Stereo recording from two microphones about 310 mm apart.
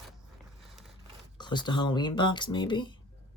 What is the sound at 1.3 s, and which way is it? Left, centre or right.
Speech, centre.